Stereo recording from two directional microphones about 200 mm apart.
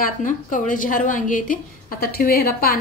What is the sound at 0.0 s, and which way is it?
A woman's voice, 40° left (ahead or behind).